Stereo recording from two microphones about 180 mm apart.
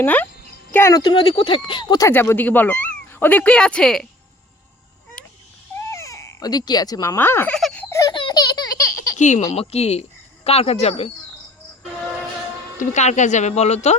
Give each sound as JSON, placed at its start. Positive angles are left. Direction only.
{"t": 0.0, "sound": "speech", "side_deg": 10}
{"t": 5.2, "sound": "a sound", "side_deg": 5}
{"t": 5.9, "sound": "baby cry", "side_deg": 15}
{"t": 9.1, "sound": "speech", "side_deg": 40}
{"t": 12.8, "sound": "speech", "side_deg": 40}